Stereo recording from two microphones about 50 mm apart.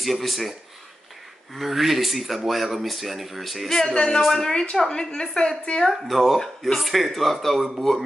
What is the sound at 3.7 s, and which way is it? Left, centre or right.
A woman's voice, centre.